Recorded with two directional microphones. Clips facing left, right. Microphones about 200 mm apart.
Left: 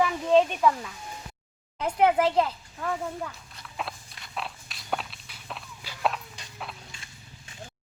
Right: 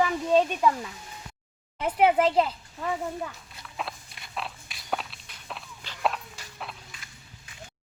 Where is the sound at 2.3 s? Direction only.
10° right (ahead or behind).